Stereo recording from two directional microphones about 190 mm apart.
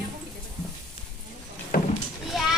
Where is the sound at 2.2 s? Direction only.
Centre (ahead or behind).